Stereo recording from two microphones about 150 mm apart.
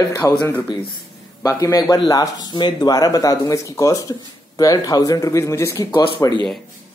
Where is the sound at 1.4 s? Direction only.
25° left (ahead or behind).